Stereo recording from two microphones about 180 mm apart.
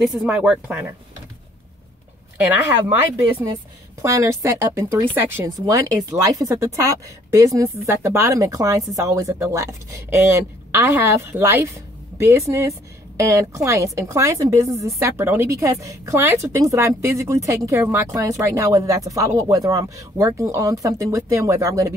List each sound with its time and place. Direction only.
0.0 s speech: centre (ahead or behind)
4.0 s a woman's voice: 15° right (ahead or behind)